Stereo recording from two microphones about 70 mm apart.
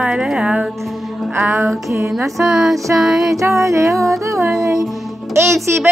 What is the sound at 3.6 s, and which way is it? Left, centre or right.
Music, right.